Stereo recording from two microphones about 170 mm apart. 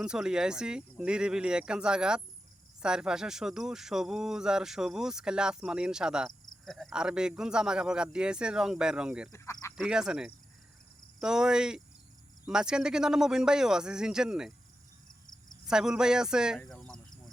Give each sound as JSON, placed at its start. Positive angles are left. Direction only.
{"t": 0.0, "sound": "speech", "side_deg": -5}
{"t": 9.3, "sound": "a sound", "side_deg": 20}
{"t": 9.7, "sound": "speech", "side_deg": -5}
{"t": 15.6, "sound": "speech", "side_deg": -5}
{"t": 16.6, "sound": "cricket", "side_deg": 5}